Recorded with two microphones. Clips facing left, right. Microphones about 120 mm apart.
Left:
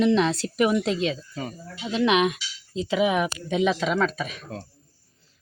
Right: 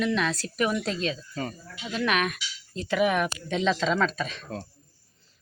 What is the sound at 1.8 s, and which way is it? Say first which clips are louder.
Speech: left 6 dB; 20° left (ahead or behind).